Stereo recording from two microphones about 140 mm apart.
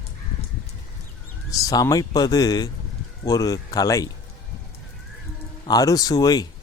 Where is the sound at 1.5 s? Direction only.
25° left (ahead or behind).